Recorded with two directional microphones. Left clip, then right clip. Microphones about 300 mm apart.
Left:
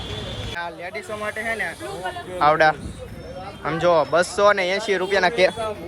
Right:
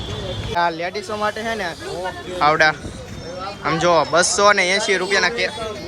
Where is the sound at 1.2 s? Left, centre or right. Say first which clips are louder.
Right 3 dB; centre.